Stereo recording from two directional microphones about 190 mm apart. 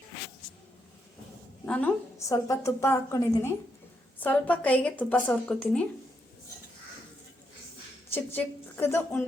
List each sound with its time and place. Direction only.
1.6 s a woman's voice: 5° left (ahead or behind)
8.1 s a woman's voice: 10° left (ahead or behind)